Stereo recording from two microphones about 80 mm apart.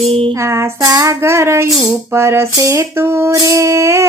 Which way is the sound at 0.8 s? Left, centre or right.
Right.